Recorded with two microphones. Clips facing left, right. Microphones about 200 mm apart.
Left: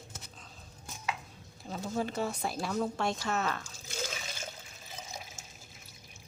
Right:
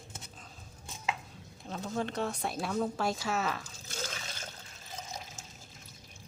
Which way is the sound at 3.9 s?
10° left (ahead or behind).